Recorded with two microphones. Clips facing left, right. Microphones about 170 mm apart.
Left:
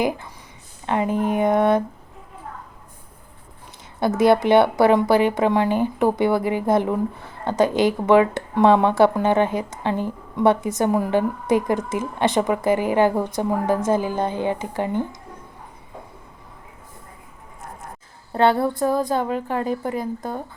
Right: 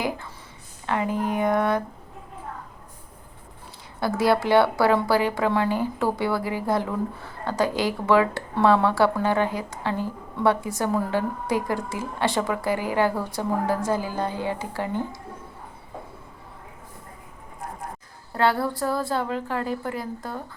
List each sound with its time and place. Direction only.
0.9 s speech: 20° left (ahead or behind)
4.0 s speech: 20° left (ahead or behind)
18.3 s speech: 25° left (ahead or behind)